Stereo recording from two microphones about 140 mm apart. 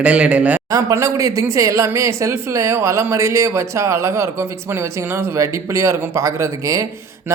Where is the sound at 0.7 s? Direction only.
20° right (ahead or behind).